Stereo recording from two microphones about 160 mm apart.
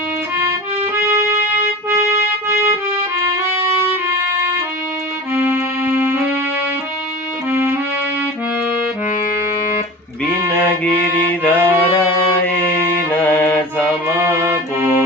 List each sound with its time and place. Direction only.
0.9 s music: 20° right (ahead or behind)
5.3 s music: 10° right (ahead or behind)
7.5 s music: 15° right (ahead or behind)
10.5 s mantra: 10° left (ahead or behind)
14.2 s music: 15° right (ahead or behind)